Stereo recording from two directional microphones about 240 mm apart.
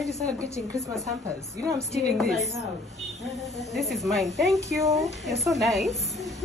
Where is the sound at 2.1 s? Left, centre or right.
Centre.